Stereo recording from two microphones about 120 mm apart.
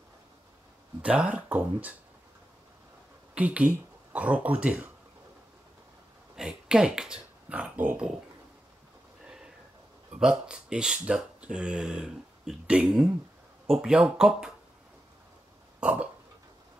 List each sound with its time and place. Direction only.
1.0 s speech: 10° right (ahead or behind)
3.3 s speech: 10° right (ahead or behind)
6.3 s speech: 5° right (ahead or behind)
10.1 s speech: 5° right (ahead or behind)
15.8 s burping: 10° right (ahead or behind)